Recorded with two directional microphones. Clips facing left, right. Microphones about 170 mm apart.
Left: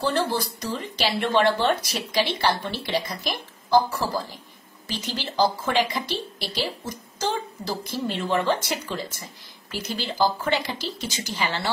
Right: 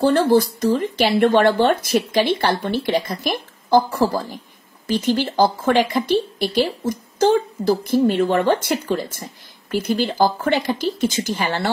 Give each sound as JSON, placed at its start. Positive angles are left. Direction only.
{"t": 0.0, "sound": "speech", "side_deg": -50}